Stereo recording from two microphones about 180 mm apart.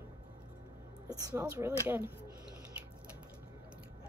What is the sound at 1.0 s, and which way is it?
Speech, 20° right (ahead or behind).